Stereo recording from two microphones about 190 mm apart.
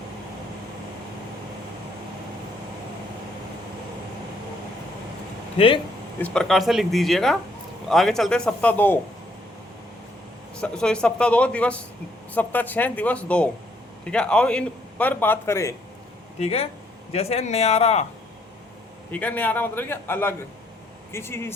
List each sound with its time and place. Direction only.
5.5 s speech: 30° left (ahead or behind)
6.1 s speech: 5° left (ahead or behind)
10.5 s a man's voice: 5° left (ahead or behind)
16.4 s speech: 30° left (ahead or behind)
19.1 s a man's voice: 10° left (ahead or behind)